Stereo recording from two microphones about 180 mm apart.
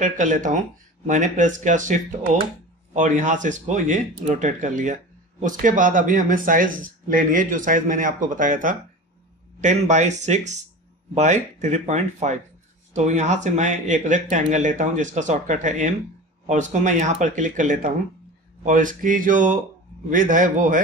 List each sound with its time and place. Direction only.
0.0 s speech: 45° right (ahead or behind)